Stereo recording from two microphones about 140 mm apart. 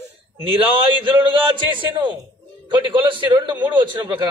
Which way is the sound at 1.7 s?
35° right (ahead or behind).